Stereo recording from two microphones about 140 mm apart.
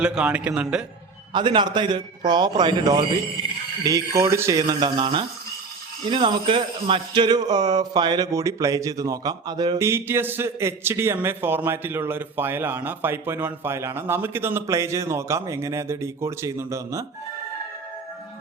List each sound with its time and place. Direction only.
0.0 s a man's voice: 5° right (ahead or behind)
1.3 s a man's voice: 35° right (ahead or behind)